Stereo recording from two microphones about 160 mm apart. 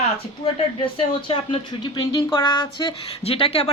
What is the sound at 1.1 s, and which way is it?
A woman's voice, 35° left (ahead or behind).